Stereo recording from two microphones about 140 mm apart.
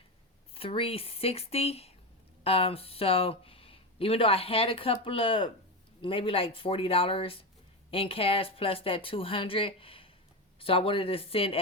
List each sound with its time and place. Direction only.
0.5 s speech: 40° left (ahead or behind)